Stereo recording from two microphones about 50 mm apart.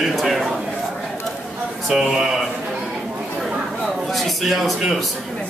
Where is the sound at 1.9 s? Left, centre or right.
Centre.